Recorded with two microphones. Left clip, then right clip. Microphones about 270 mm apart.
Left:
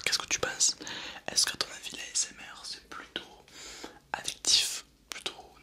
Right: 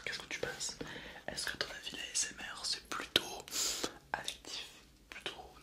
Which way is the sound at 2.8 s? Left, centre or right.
Centre.